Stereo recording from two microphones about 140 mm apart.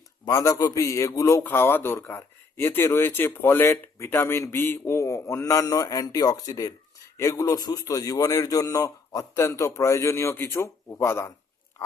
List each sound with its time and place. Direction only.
0.3 s a man's voice: 25° left (ahead or behind)